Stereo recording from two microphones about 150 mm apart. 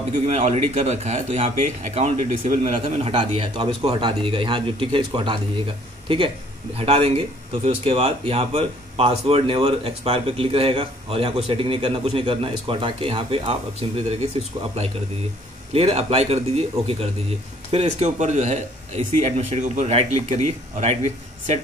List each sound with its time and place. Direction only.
0.3 s speech: 45° right (ahead or behind)
2.6 s speech: 40° right (ahead or behind)
15.7 s speech: 40° right (ahead or behind)
17.6 s speech: 45° right (ahead or behind)